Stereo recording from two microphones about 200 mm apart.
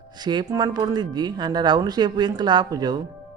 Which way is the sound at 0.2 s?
20° right (ahead or behind).